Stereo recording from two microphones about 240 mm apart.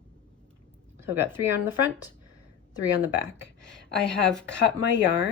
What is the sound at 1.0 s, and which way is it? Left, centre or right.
Speech, centre.